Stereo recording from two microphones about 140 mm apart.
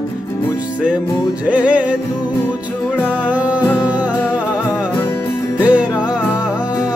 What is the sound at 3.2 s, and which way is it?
Music, 10° right (ahead or behind).